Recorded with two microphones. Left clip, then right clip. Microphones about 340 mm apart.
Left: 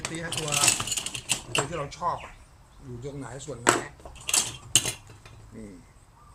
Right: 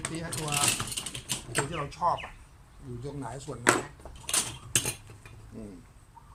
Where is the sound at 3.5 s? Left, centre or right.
Centre.